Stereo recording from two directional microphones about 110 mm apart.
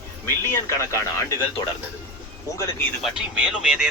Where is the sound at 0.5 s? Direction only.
25° left (ahead or behind).